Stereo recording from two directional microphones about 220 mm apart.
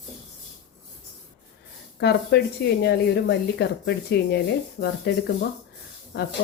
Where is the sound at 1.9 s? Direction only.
50° left (ahead or behind).